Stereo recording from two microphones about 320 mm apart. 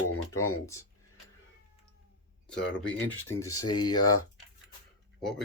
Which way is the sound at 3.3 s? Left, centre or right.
Centre.